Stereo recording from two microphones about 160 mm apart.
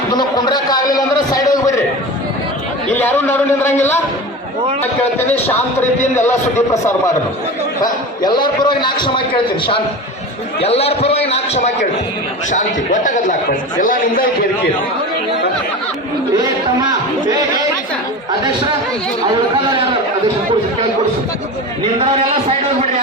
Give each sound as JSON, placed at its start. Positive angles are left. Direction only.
{"t": 0.1, "sound": "a sound", "side_deg": 25}
{"t": 3.0, "sound": "a man's voice", "side_deg": 10}
{"t": 8.2, "sound": "a man's voice", "side_deg": 25}
{"t": 10.6, "sound": "a man's voice", "side_deg": 40}
{"t": 22.0, "sound": "a man's voice", "side_deg": -40}